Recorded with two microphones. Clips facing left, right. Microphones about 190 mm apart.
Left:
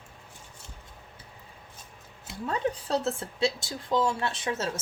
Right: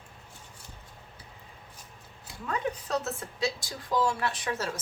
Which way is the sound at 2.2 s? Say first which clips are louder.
Left 3 dB; 30° left (ahead or behind).